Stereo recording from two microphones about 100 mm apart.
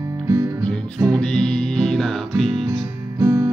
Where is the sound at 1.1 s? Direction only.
5° left (ahead or behind).